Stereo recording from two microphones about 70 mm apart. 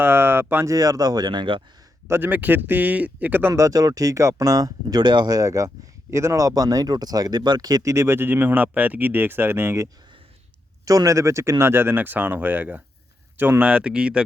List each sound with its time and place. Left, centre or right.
0.0 s speech: right
0.7 s speech: right
2.0 s speech: right
3.5 s speech: right
4.4 s speech: right
5.4 s speech: right
7.9 s speech: right
10.8 s speech: right
13.7 s speech: centre